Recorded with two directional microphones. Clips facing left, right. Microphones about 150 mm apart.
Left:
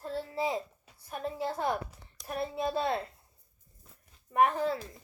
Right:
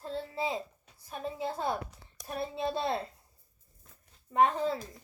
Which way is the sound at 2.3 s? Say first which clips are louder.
Left 1 dB; 25° right (ahead or behind).